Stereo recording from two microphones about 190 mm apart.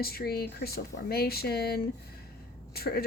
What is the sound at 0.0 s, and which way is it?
Speech, 55° left (ahead or behind).